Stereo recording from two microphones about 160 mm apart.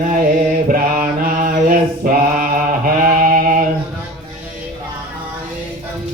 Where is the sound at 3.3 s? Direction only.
60° right (ahead or behind).